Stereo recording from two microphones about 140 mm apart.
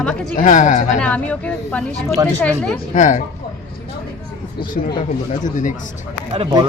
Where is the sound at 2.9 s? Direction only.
60° left (ahead or behind).